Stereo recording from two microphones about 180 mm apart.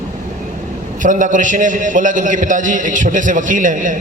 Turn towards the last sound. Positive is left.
turn(degrees=-45)  # may be behind; listen again after turning